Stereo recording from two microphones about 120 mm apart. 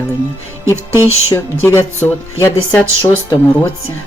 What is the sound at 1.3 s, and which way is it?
Speech, 20° left (ahead or behind).